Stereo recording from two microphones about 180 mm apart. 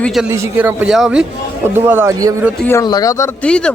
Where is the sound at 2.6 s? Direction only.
10° left (ahead or behind).